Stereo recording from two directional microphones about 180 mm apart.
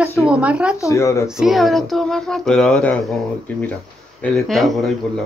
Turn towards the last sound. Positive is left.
turn(degrees=0)  # may be behind; listen again after turning